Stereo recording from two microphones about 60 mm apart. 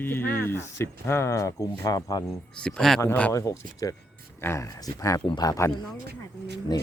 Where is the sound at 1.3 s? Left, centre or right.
Left.